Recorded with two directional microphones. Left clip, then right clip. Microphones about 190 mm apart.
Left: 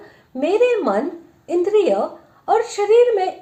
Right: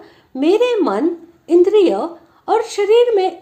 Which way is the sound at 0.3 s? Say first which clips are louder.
Right 2 dB; 30° right (ahead or behind).